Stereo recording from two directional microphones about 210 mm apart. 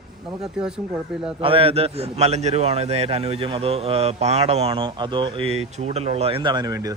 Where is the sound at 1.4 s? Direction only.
25° right (ahead or behind).